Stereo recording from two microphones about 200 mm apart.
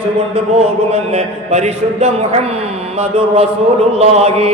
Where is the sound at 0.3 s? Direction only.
30° right (ahead or behind).